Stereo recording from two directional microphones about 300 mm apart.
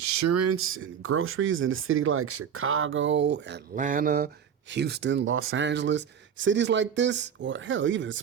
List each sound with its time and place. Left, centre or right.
0.0 s speech: right